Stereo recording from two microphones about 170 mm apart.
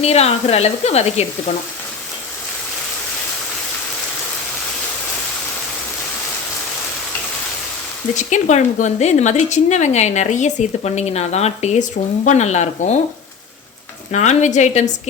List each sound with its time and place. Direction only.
0.0 s speech: 35° left (ahead or behind)
8.1 s a woman's voice: 45° left (ahead or behind)
14.1 s a woman's voice: 45° left (ahead or behind)